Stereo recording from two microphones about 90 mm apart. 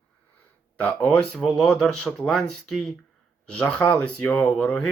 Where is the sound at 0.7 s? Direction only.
15° left (ahead or behind).